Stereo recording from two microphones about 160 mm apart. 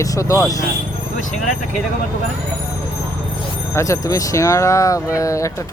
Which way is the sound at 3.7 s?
20° left (ahead or behind).